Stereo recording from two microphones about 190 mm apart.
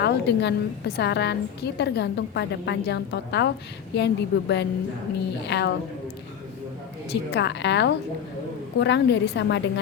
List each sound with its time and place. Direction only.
0.0 s a woman's voice: 60° left (ahead or behind)
7.1 s a woman's voice: 65° left (ahead or behind)